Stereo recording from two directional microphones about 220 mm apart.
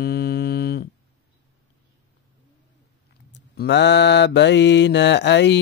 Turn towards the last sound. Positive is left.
turn(degrees=55)  # may be behind; listen again after turning